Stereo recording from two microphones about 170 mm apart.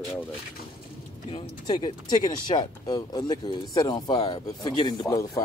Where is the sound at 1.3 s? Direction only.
25° left (ahead or behind).